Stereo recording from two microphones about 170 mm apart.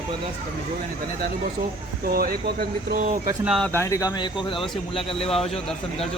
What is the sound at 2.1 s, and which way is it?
Speech, 60° right (ahead or behind).